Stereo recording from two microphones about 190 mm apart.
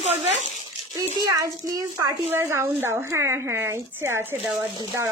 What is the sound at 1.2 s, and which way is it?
A woman's voice, 20° right (ahead or behind).